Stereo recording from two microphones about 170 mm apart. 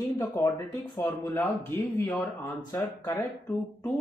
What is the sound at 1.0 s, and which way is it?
Speech, 10° left (ahead or behind).